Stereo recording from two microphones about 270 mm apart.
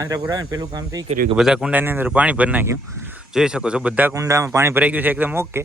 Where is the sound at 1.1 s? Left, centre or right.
Right.